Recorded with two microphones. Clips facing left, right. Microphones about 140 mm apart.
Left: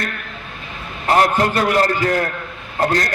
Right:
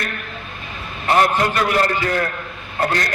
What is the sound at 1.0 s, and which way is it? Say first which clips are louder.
A man's voice: left 1 dB; 35° left (ahead or behind).